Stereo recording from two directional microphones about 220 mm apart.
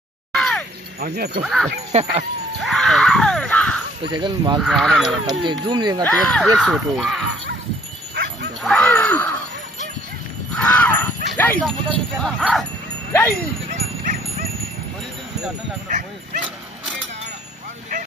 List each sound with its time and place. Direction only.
0.3 s a sound: centre (ahead or behind)
0.9 s speech: 45° right (ahead or behind)
1.4 s speech: centre (ahead or behind)
1.9 s speech: 30° right (ahead or behind)
2.6 s screaming: centre (ahead or behind)
4.1 s speech: 20° right (ahead or behind)
4.6 s speech: centre (ahead or behind)
5.2 s speech: 20° right (ahead or behind)
6.0 s speech: centre (ahead or behind)
8.1 s bow-wow: 50° right (ahead or behind)
8.6 s speech: 5° left (ahead or behind)
10.5 s a sound: 5° left (ahead or behind)
11.3 s speech: 10° left (ahead or behind)
13.7 s dog: 35° right (ahead or behind)